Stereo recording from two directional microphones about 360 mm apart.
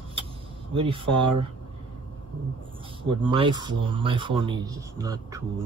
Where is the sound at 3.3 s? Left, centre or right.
Centre.